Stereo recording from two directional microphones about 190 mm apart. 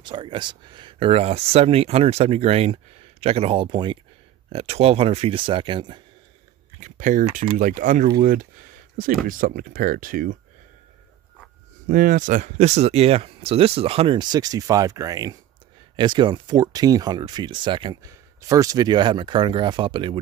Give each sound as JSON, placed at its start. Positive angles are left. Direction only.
{"t": 0.0, "sound": "speech", "side_deg": -25}
{"t": 6.8, "sound": "speech", "side_deg": -40}
{"t": 11.9, "sound": "speech", "side_deg": -45}